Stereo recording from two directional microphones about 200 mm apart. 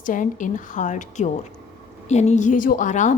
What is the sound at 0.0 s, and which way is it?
A woman's voice, 40° left (ahead or behind).